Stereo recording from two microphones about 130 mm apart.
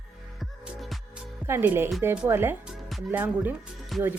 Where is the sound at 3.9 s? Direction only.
Centre (ahead or behind).